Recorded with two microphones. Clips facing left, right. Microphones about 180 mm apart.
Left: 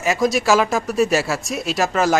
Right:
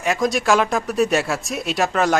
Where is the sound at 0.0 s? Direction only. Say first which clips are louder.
Left 2 dB; centre (ahead or behind).